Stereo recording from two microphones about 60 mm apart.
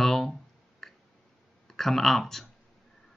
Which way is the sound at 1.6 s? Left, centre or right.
Centre.